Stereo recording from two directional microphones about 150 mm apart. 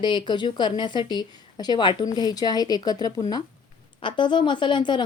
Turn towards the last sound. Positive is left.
turn(degrees=30)  # may be behind; listen again after turning